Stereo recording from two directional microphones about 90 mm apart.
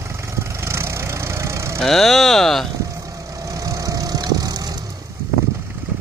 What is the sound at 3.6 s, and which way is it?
Vehicle, 40° right (ahead or behind).